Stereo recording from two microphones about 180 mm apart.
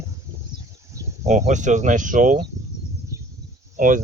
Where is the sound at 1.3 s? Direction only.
40° right (ahead or behind).